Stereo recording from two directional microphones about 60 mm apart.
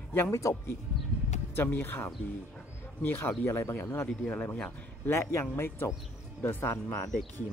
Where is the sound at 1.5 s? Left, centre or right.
Left.